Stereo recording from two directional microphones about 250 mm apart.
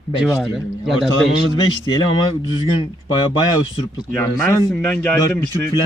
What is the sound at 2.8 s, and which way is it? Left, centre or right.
A man's voice, centre.